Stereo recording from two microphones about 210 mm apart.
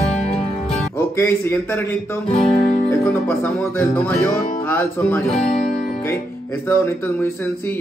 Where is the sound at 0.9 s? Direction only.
10° left (ahead or behind).